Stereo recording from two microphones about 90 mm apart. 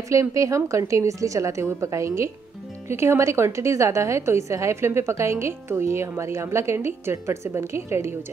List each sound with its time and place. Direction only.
0.1 s a woman's voice: 35° right (ahead or behind)